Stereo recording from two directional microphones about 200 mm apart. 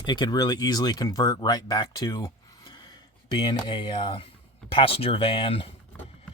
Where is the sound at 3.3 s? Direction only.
25° left (ahead or behind).